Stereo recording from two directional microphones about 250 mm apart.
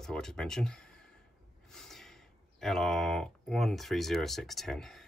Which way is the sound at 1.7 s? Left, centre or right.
Centre.